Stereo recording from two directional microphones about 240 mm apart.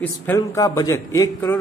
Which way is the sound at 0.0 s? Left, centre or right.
Centre.